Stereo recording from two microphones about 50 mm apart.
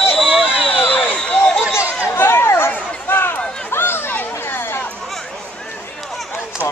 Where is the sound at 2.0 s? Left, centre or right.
Left.